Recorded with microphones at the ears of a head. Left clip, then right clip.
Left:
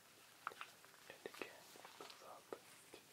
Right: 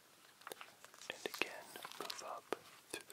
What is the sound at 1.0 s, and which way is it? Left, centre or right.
Whispering, right.